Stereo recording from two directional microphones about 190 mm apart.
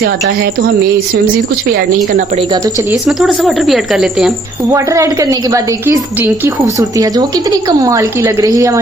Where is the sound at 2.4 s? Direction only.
25° right (ahead or behind).